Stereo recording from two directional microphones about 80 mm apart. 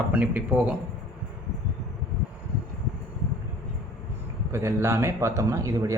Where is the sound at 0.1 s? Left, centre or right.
Centre.